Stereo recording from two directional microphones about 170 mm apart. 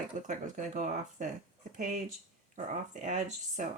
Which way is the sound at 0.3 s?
45° right (ahead or behind).